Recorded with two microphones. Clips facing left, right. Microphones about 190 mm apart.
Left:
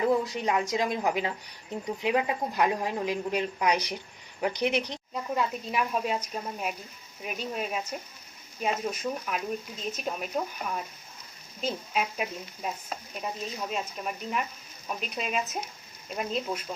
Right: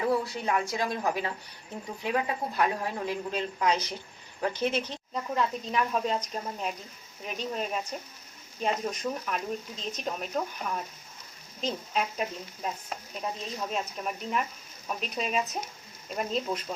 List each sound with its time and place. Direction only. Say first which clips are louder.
0.1 s a woman's voice: left 2 dB; 20° left (ahead or behind)